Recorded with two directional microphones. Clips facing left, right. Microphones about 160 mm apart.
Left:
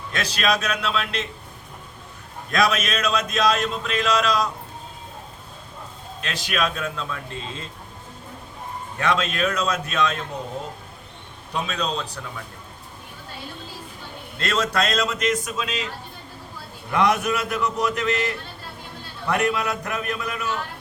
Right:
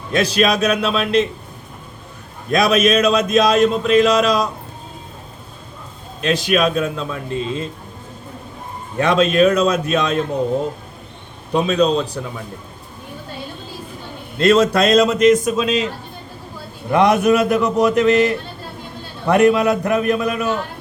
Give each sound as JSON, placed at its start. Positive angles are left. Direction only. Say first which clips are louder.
{"t": 0.1, "sound": "speech", "louder": "right 8 dB", "side_deg": -15}
{"t": 2.5, "sound": "speech", "louder": "right 8 dB", "side_deg": -15}
{"t": 6.2, "sound": "speech", "louder": "right 9 dB", "side_deg": -20}
{"t": 9.0, "sound": "speech", "louder": "right 9 dB", "side_deg": -20}
{"t": 11.5, "sound": "speech", "louder": "right 11 dB", "side_deg": -20}
{"t": 14.3, "sound": "speech", "louder": "right 10 dB", "side_deg": -10}
{"t": 16.9, "sound": "a man's voice", "louder": "right 8 dB", "side_deg": -20}